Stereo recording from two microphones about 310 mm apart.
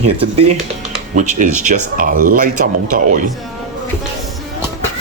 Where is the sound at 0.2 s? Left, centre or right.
Centre.